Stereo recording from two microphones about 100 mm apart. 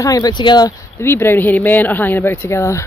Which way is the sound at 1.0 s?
25° left (ahead or behind).